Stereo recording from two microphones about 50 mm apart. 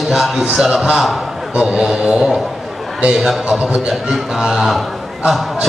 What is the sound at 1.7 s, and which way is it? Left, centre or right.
A man's voice, centre.